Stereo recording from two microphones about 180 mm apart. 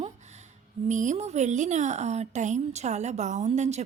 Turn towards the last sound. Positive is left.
turn(degrees=-40)  # may be behind; listen again after turning